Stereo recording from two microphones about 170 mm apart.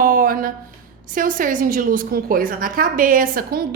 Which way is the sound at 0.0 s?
55° right (ahead or behind).